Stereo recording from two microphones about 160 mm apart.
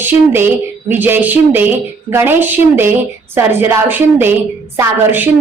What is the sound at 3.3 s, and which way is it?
A woman's voice, 15° right (ahead or behind).